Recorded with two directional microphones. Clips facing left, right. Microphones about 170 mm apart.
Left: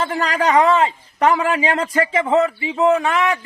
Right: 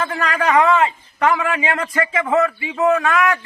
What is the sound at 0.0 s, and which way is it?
A man's voice, 30° left (ahead or behind).